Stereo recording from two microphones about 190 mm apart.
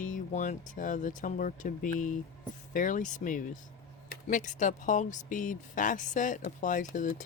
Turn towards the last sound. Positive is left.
turn(degrees=45)  # may be behind; listen again after turning